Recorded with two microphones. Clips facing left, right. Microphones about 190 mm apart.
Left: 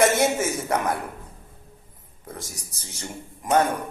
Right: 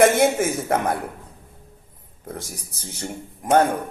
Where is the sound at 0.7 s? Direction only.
55° right (ahead or behind).